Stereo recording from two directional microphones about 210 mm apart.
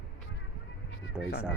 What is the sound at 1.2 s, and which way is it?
Speech, 5° right (ahead or behind).